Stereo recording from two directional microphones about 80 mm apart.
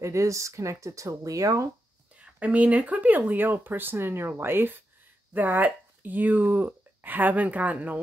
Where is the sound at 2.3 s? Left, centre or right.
Centre.